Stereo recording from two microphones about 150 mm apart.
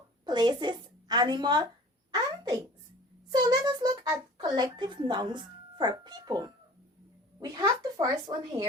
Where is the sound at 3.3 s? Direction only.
25° right (ahead or behind).